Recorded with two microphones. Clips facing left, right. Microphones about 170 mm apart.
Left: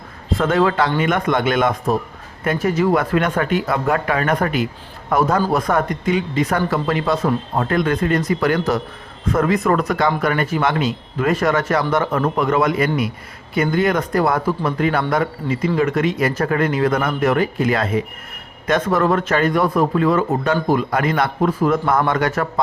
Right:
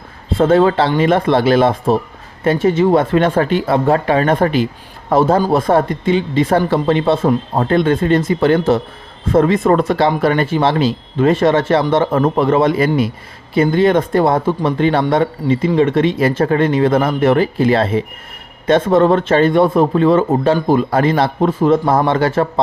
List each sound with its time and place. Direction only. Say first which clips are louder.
0.3 s speech: right 5 dB; 30° right (ahead or behind)